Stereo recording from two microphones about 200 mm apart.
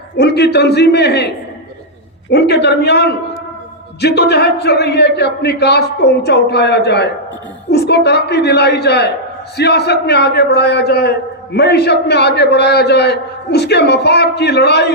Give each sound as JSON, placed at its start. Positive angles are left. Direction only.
{"t": 0.2, "sound": "a man's voice", "side_deg": 55}
{"t": 2.3, "sound": "a man's voice", "side_deg": 55}